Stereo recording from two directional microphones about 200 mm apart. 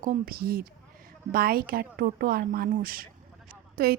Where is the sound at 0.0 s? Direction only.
45° right (ahead or behind).